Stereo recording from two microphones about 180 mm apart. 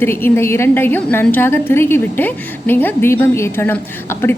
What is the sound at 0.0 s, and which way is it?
A woman's voice, 10° left (ahead or behind).